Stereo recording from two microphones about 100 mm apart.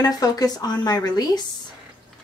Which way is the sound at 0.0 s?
40° left (ahead or behind).